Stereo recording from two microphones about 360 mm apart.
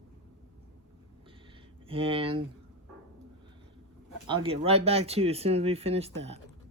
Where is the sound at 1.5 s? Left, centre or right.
Centre.